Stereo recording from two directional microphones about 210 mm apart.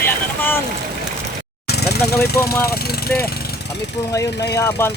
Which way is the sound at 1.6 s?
50° left (ahead or behind).